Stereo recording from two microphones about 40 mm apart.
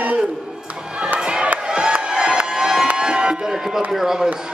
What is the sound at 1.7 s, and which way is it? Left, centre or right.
Music, right.